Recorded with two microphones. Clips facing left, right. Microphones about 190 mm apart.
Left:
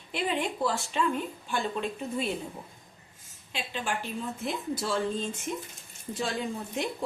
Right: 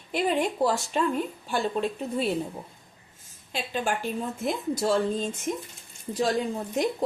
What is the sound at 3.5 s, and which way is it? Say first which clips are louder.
A woman's voice: right 5 dB; 45° right (ahead or behind).